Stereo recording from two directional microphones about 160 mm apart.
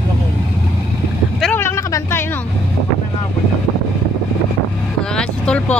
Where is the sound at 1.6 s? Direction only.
15° left (ahead or behind).